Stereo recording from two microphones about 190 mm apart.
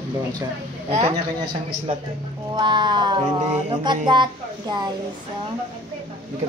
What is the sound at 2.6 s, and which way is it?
Child singing, 25° right (ahead or behind).